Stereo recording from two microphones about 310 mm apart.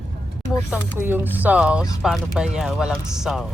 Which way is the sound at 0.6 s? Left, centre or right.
Centre.